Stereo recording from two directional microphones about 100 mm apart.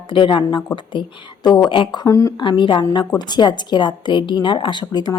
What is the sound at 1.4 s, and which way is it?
Speech, 45° left (ahead or behind).